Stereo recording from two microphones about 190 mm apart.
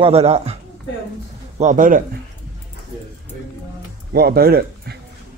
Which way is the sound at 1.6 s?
45° right (ahead or behind).